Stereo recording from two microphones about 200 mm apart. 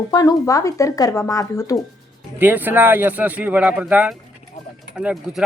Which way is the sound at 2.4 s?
10° right (ahead or behind).